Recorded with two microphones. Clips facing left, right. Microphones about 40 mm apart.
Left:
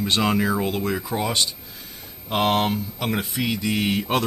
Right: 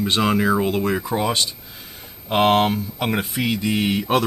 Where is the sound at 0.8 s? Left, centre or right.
Centre.